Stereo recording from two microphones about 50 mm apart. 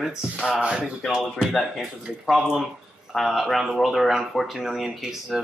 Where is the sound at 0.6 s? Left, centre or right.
Right.